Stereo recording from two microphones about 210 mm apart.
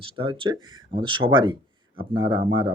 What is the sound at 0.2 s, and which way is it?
Speech, 25° right (ahead or behind).